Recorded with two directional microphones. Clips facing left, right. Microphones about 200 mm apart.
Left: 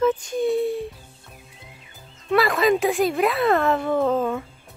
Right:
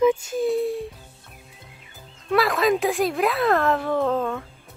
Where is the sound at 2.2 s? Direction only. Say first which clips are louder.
Left 1 dB; centre (ahead or behind).